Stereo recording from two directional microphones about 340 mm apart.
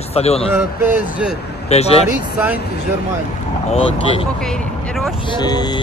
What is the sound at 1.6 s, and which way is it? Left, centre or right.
Speech, centre.